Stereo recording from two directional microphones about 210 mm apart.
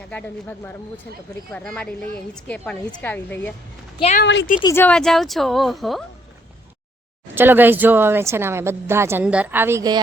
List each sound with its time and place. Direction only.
0.1 s a woman's voice: 10° left (ahead or behind)
4.2 s speech: 60° left (ahead or behind)
4.6 s a woman's voice: 10° left (ahead or behind)
7.3 s speech: 10° right (ahead or behind)